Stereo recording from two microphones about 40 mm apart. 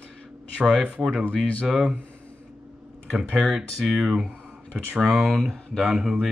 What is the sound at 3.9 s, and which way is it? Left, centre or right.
Speech, centre.